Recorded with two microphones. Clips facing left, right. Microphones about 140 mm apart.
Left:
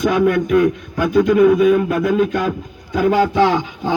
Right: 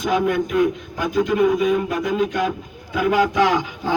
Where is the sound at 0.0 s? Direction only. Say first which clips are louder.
Left 4 dB; 65° left (ahead or behind).